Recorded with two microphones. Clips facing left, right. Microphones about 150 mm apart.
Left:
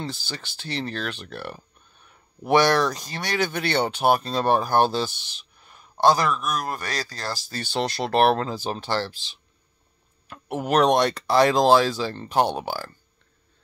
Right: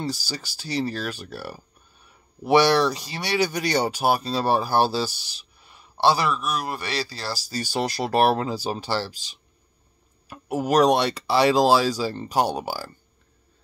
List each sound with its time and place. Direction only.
0.0 s speech: 5° right (ahead or behind)
5.1 s speech: 35° right (ahead or behind)
5.6 s speech: 5° right (ahead or behind)
10.2 s speech: 5° right (ahead or behind)